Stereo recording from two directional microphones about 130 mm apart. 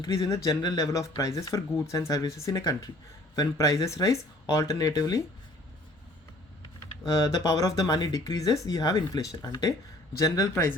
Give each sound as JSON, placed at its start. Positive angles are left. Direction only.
{"t": 0.0, "sound": "speech", "side_deg": 25}
{"t": 7.1, "sound": "speech", "side_deg": 25}